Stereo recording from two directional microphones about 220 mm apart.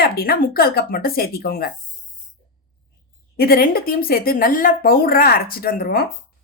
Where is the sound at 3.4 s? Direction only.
40° left (ahead or behind).